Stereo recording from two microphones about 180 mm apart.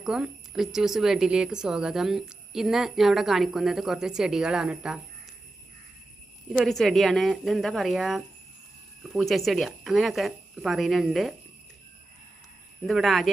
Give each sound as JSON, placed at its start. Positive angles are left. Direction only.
{"t": 0.0, "sound": "speech", "side_deg": -5}
{"t": 6.5, "sound": "speech", "side_deg": 0}
{"t": 12.8, "sound": "speech", "side_deg": 0}